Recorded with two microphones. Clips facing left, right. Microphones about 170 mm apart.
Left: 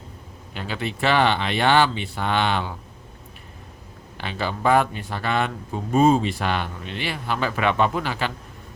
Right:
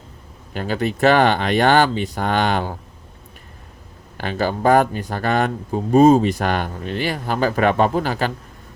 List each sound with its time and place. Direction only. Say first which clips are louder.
0.5 s speech: right 7 dB; 45° right (ahead or behind)
4.2 s speech: right 5 dB; 45° right (ahead or behind)